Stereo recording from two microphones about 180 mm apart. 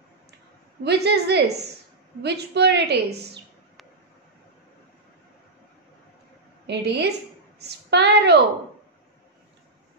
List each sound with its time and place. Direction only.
0.8 s a woman's voice: 65° right (ahead or behind)
6.7 s a woman's voice: 70° right (ahead or behind)